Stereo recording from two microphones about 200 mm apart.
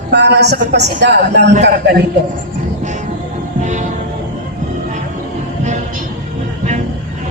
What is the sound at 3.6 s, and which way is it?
Music, 35° right (ahead or behind).